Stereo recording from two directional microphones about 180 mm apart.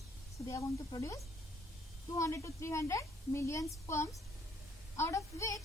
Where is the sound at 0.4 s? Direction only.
15° left (ahead or behind).